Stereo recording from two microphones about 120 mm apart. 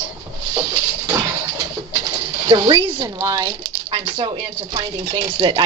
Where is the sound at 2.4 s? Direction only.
40° right (ahead or behind).